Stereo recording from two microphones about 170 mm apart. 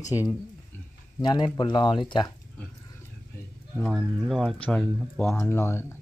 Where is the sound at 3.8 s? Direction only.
5° left (ahead or behind).